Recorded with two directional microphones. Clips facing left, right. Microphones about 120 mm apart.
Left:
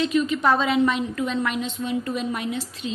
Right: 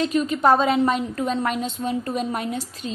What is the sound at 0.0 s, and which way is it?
A woman's voice, 40° right (ahead or behind).